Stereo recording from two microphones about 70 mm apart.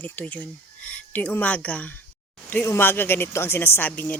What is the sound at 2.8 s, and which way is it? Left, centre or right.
A woman's voice, left.